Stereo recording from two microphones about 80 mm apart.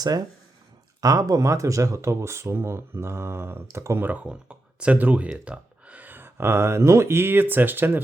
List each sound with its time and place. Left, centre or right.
1.0 s speech: right